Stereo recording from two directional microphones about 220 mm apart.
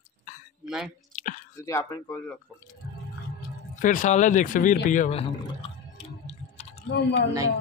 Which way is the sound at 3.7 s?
35° left (ahead or behind).